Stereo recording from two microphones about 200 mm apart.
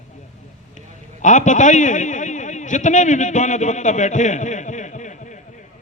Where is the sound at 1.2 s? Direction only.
40° left (ahead or behind).